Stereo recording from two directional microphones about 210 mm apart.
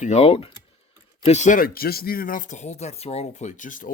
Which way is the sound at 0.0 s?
30° left (ahead or behind).